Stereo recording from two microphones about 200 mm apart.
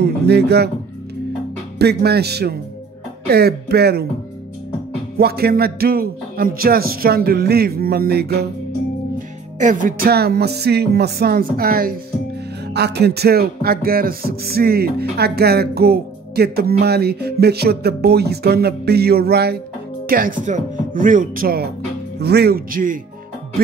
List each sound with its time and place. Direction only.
0.0 s music: 55° right (ahead or behind)
1.8 s music: 55° right (ahead or behind)
5.1 s music: 50° right (ahead or behind)
9.6 s music: 40° right (ahead or behind)
20.1 s speech: 45° right (ahead or behind)
22.2 s music: 55° right (ahead or behind)